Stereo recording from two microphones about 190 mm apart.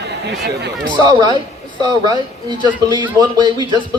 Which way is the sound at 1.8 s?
20° right (ahead or behind).